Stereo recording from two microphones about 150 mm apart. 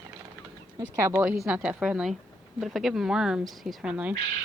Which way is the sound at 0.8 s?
20° right (ahead or behind).